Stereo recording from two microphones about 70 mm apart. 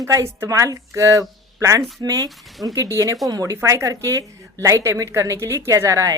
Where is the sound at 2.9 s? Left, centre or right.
Right.